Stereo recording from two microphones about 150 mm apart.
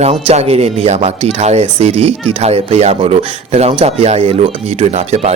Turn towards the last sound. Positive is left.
turn(degrees=-45)  # may be behind; listen again after turning